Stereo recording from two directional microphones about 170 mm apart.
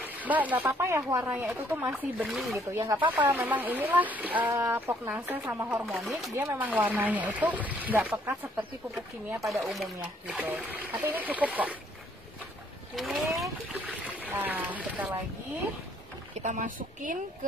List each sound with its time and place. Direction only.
0.0 s speech: 10° right (ahead or behind)
2.2 s speech: centre (ahead or behind)
2.7 s speech: 15° right (ahead or behind)
5.9 s speech: centre (ahead or behind)
6.3 s speech: 10° right (ahead or behind)
9.5 s speech: centre (ahead or behind)
12.9 s speech: centre (ahead or behind)
16.4 s speech: 50° right (ahead or behind)